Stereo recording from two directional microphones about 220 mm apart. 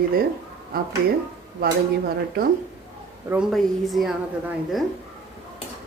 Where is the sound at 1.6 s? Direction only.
45° right (ahead or behind).